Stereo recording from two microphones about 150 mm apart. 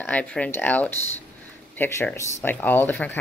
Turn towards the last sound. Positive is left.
turn(degrees=10)  # may be behind; listen again after turning